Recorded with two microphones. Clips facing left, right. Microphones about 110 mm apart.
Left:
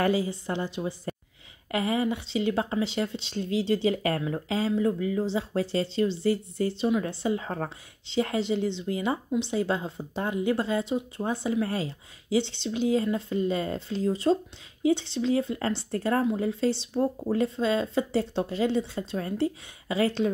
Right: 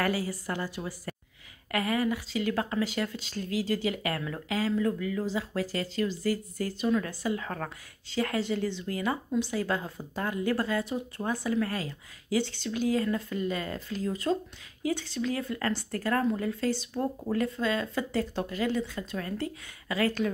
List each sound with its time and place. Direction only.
0.0 s a woman's voice: 20° left (ahead or behind)